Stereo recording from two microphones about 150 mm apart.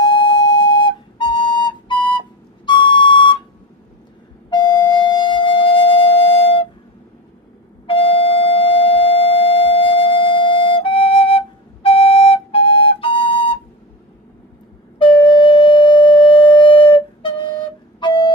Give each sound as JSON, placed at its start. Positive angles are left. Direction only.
{"t": 0.0, "sound": "flute", "side_deg": 30}
{"t": 2.6, "sound": "whistle", "side_deg": 30}
{"t": 4.4, "sound": "music", "side_deg": 30}
{"t": 7.9, "sound": "music", "side_deg": 35}
{"t": 14.9, "sound": "wind instrument", "side_deg": 35}